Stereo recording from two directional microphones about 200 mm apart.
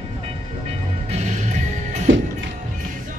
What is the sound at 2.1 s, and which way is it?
Music, 75° right (ahead or behind).